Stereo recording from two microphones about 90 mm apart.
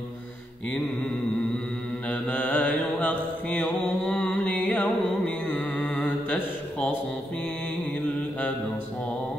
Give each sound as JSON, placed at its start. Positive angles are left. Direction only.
{"t": 2.0, "sound": "mantra", "side_deg": 20}
{"t": 3.7, "sound": "mantra", "side_deg": 5}
{"t": 4.6, "sound": "music", "side_deg": 15}